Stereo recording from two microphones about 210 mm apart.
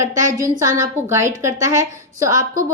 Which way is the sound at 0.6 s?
15° right (ahead or behind).